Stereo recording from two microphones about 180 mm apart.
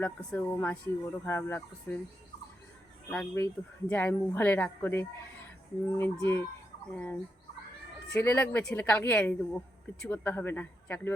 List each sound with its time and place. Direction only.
0.0 s speech: 5° left (ahead or behind)
3.1 s speech: 10° left (ahead or behind)